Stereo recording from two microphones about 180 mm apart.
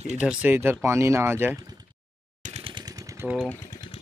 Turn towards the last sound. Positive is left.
turn(degrees=0)  # may be behind; listen again after turning